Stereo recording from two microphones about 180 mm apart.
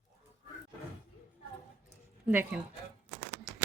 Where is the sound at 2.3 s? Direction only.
10° right (ahead or behind).